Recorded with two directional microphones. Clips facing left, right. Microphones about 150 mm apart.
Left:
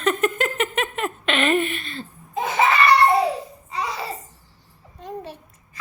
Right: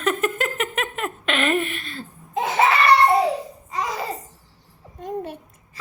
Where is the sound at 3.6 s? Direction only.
45° right (ahead or behind).